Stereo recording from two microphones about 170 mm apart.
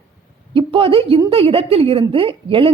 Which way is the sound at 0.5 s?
30° right (ahead or behind).